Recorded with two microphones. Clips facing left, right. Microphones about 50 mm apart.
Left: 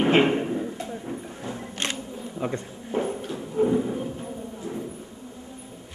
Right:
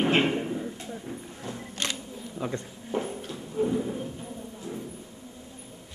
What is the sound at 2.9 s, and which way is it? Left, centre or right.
Clip-clop, centre.